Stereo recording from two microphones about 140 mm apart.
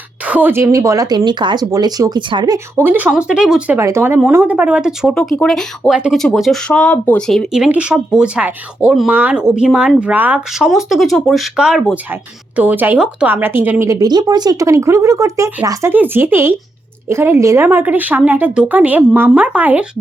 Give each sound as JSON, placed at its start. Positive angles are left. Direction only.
{"t": 0.3, "sound": "a woman's voice", "side_deg": -10}
{"t": 2.7, "sound": "speech", "side_deg": -15}
{"t": 3.8, "sound": "a woman's voice", "side_deg": -20}
{"t": 7.3, "sound": "a woman's voice", "side_deg": 0}